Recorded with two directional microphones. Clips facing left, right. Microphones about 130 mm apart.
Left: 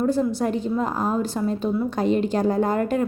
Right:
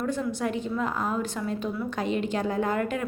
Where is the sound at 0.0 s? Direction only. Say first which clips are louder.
Left 7 dB; 35° left (ahead or behind).